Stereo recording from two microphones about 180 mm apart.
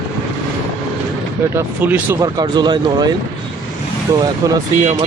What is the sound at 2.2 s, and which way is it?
Speech, 25° right (ahead or behind).